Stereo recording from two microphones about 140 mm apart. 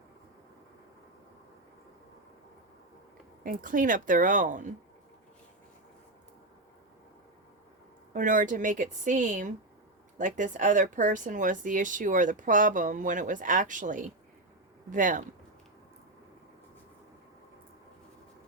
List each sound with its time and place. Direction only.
3.4 s speech: 75° right (ahead or behind)
8.1 s speech: 65° right (ahead or behind)